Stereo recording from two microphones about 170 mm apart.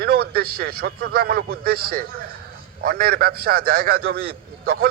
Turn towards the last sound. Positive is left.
turn(degrees=-60)  # may be behind; listen again after turning